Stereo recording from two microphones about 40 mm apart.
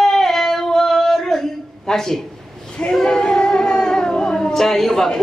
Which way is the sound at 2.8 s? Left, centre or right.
Centre.